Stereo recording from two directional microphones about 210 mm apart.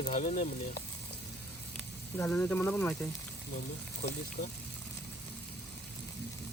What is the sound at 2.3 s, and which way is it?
Speech, 10° left (ahead or behind).